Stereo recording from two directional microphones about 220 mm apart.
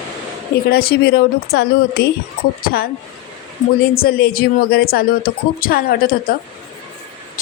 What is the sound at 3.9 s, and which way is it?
Speech, 40° left (ahead or behind).